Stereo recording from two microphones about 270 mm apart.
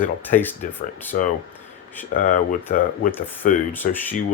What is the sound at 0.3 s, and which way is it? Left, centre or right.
Speech, left.